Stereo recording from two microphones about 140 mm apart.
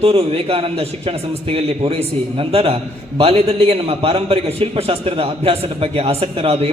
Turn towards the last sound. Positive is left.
turn(degrees=-45)  # may be behind; listen again after turning